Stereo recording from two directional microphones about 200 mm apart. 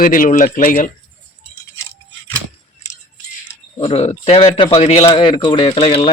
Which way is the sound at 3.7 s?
25° left (ahead or behind).